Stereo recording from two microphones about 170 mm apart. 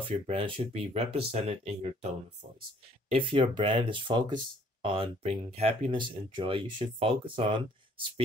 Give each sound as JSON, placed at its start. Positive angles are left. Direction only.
{"t": 0.3, "sound": "speech", "side_deg": -35}